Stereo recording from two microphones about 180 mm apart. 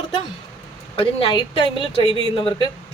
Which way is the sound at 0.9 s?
30° left (ahead or behind).